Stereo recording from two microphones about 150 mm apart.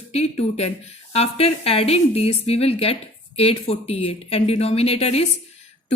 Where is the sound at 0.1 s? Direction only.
45° left (ahead or behind).